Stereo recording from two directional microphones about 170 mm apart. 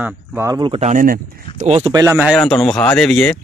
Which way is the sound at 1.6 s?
35° right (ahead or behind).